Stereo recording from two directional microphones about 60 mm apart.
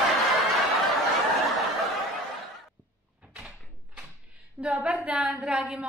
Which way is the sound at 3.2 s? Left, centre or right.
Centre.